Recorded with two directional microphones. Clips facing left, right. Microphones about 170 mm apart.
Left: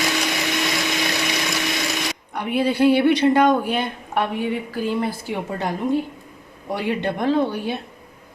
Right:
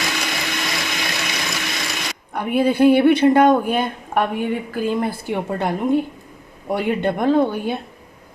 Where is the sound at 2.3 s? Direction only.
50° right (ahead or behind).